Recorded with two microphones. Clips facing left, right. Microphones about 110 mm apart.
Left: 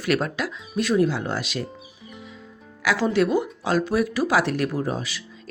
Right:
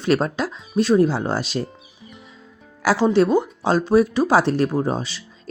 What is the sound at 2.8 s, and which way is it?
Speech, 35° right (ahead or behind).